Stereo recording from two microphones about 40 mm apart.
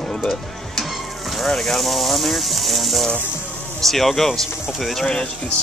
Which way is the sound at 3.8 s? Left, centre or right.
Centre.